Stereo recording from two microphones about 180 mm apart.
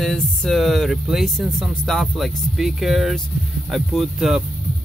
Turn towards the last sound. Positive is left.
turn(degrees=-5)  # may be behind; listen again after turning